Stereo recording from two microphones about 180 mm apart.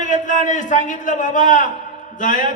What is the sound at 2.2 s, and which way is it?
Speech, 45° left (ahead or behind).